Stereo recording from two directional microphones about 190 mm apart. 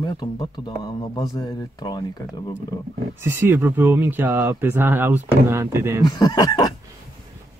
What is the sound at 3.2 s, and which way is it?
Speech, 15° right (ahead or behind).